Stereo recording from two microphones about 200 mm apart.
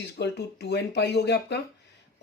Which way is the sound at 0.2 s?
55° left (ahead or behind).